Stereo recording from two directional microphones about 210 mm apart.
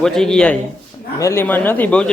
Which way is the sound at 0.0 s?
Centre (ahead or behind).